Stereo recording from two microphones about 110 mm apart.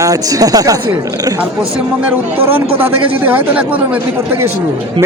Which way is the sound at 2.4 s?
20° right (ahead or behind).